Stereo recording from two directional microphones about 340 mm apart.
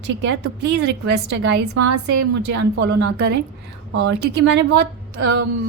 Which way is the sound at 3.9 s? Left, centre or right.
Right.